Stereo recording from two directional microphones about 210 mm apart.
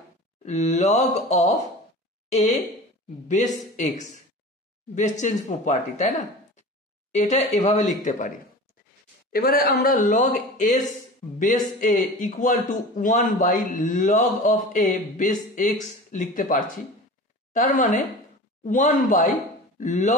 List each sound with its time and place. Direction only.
0.5 s a man's voice: 35° left (ahead or behind)
2.2 s a sound: 35° left (ahead or behind)
3.3 s a man's voice: 35° left (ahead or behind)
9.3 s a man's voice: 45° left (ahead or behind)